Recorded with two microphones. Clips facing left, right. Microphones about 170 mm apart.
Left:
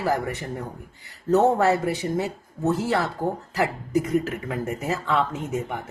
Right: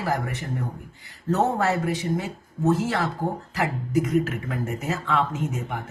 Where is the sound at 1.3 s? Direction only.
35° left (ahead or behind).